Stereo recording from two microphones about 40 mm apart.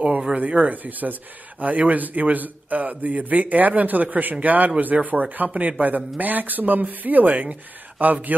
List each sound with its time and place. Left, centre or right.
0.4 s a man's voice: right